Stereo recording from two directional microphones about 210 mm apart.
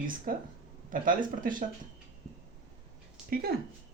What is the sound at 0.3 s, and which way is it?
Speech, 40° right (ahead or behind).